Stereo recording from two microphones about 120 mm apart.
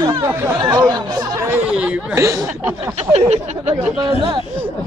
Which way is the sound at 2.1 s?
25° right (ahead or behind).